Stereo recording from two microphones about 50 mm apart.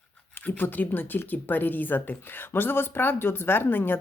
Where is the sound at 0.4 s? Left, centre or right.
Left.